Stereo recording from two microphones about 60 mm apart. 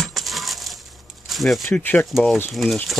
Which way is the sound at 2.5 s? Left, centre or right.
Centre.